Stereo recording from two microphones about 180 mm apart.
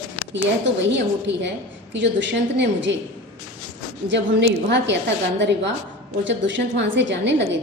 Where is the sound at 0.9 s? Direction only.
75° right (ahead or behind).